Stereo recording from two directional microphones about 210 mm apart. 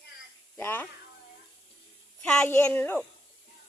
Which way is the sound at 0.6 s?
10° left (ahead or behind).